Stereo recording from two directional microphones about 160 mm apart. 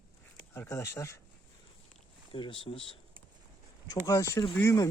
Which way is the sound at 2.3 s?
35° left (ahead or behind).